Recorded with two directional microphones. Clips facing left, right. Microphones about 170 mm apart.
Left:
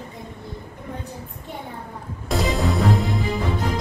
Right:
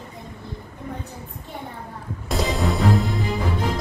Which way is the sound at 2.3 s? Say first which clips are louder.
Left 1 dB; centre (ahead or behind).